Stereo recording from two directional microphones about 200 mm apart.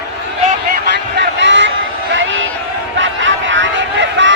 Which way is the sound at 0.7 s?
60° right (ahead or behind).